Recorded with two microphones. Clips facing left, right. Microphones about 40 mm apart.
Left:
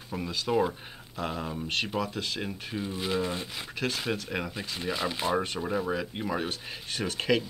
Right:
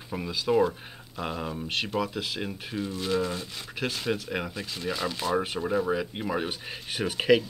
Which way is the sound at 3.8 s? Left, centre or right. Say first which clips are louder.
Right 1 dB; centre.